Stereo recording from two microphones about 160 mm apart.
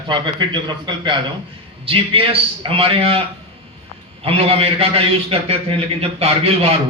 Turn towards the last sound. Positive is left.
turn(degrees=-40)  # may be behind; listen again after turning